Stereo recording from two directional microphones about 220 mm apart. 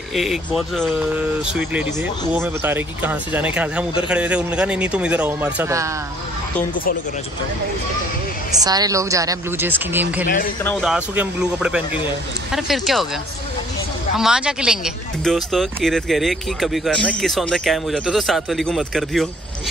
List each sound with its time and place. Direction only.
0.1 s speech: centre (ahead or behind)
8.6 s speech: 15° right (ahead or behind)
10.2 s speech: 40° left (ahead or behind)
10.6 s speech: 5° left (ahead or behind)
14.1 s speech: 5° right (ahead or behind)